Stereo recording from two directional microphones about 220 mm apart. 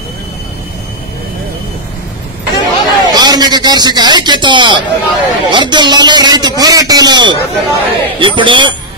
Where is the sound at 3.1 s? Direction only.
20° right (ahead or behind).